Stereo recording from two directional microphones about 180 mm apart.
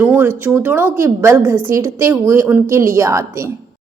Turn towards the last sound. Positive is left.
turn(degrees=-15)  # may be behind; listen again after turning